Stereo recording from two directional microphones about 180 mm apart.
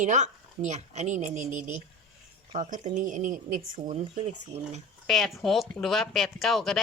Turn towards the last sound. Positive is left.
turn(degrees=0)  # may be behind; listen again after turning